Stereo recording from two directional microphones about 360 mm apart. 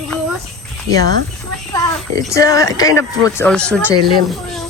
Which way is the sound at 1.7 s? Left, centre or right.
Centre.